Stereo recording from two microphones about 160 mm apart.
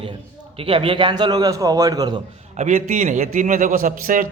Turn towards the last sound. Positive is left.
turn(degrees=-55)  # may be behind; listen again after turning